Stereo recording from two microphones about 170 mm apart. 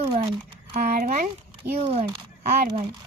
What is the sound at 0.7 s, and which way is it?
Speech, 55° right (ahead or behind).